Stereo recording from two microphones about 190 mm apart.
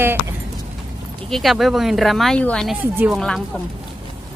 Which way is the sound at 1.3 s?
Centre (ahead or behind).